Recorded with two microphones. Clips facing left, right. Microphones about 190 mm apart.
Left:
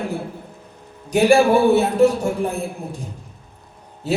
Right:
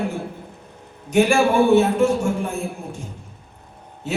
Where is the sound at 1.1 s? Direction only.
35° left (ahead or behind).